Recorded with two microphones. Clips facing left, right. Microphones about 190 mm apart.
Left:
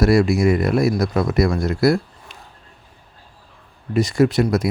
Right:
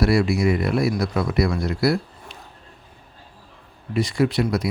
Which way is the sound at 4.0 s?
45° left (ahead or behind).